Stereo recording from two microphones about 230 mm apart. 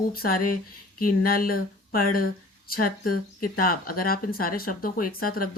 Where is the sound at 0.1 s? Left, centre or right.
Left.